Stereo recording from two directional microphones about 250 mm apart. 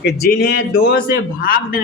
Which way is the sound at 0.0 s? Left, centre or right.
Left.